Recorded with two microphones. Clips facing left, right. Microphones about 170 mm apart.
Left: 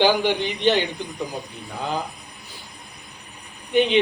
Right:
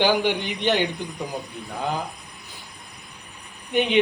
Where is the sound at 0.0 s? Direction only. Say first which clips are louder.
Left 2 dB; 15° right (ahead or behind).